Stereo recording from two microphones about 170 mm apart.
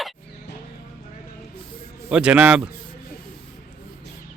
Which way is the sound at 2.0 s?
5° right (ahead or behind).